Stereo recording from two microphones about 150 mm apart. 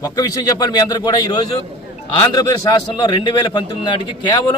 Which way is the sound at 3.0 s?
30° left (ahead or behind).